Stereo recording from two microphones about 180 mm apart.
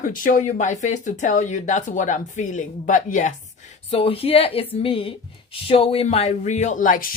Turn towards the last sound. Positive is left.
turn(degrees=45)  # may be behind; listen again after turning